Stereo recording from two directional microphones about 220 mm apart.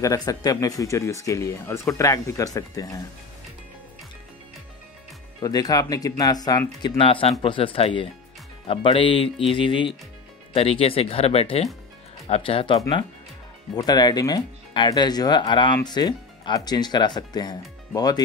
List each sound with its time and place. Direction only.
0.0 s speech: 15° left (ahead or behind)
5.4 s speech: 15° left (ahead or behind)